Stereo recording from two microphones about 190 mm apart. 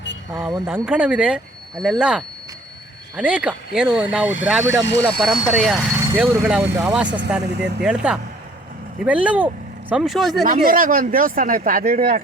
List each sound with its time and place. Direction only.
0.3 s speech: 15° right (ahead or behind)
7.4 s speech: 60° right (ahead or behind)
7.9 s speech: 5° right (ahead or behind)
10.4 s speech: 45° right (ahead or behind)